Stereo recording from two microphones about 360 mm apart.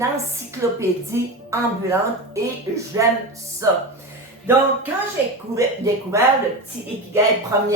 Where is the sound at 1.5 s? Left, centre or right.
Centre.